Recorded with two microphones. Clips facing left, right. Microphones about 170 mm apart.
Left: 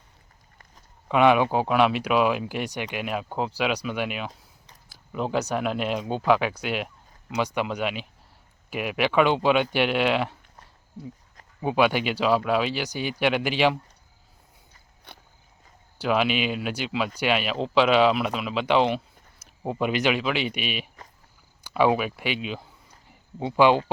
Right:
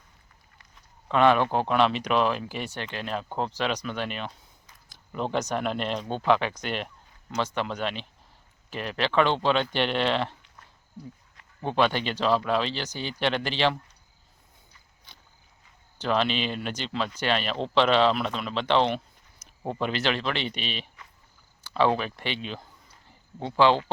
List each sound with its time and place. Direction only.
1.0 s speech: 10° left (ahead or behind)
11.6 s speech: 10° left (ahead or behind)
15.1 s a sound: 60° left (ahead or behind)
16.0 s speech: 10° left (ahead or behind)